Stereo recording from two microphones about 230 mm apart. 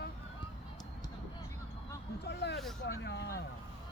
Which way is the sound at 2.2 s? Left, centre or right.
Left.